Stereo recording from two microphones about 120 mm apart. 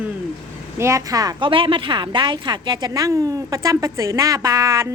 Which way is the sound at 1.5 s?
45° right (ahead or behind).